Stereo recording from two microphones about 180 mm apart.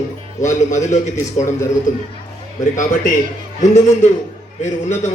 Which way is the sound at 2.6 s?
45° left (ahead or behind).